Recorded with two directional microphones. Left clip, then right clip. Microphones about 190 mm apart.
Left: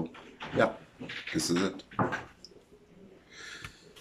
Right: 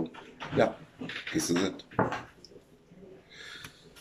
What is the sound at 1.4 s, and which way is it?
Speech, centre (ahead or behind).